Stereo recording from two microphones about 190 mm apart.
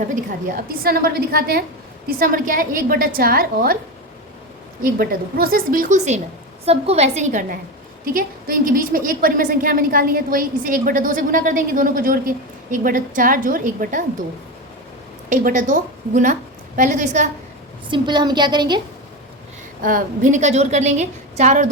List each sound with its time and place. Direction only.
0.3 s a woman's voice: 50° right (ahead or behind)
4.8 s a woman's voice: 50° right (ahead or behind)
15.3 s a woman's voice: 40° right (ahead or behind)
17.9 s a woman's voice: 25° right (ahead or behind)
19.8 s a woman's voice: 45° right (ahead or behind)